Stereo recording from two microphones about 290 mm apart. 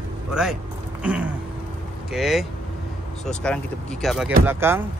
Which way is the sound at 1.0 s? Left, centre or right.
Centre.